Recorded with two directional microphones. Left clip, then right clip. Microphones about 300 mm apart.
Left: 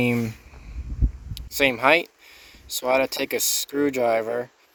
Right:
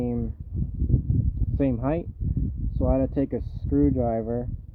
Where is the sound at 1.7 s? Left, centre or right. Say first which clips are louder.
Left 10 dB; centre.